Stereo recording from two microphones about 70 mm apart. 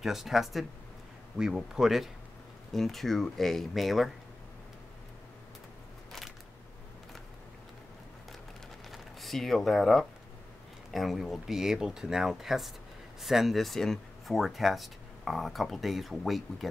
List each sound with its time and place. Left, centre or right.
0.0 s speech: centre
8.9 s speech: centre